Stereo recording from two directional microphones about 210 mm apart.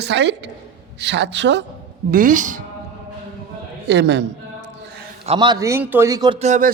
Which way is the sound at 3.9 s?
55° right (ahead or behind).